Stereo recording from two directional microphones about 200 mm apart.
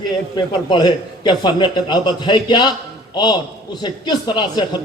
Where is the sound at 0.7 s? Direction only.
20° left (ahead or behind).